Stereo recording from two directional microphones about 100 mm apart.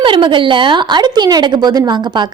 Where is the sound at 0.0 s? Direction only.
55° right (ahead or behind).